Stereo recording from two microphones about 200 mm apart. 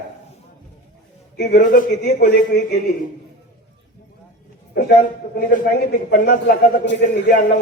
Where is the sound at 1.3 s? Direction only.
50° left (ahead or behind).